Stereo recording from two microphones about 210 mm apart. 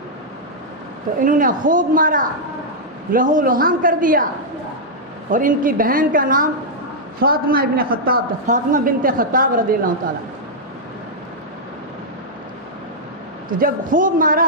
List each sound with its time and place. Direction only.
1.2 s a woman's voice: 40° right (ahead or behind)
5.3 s a woman's voice: 40° right (ahead or behind)
13.5 s a woman's voice: 40° right (ahead or behind)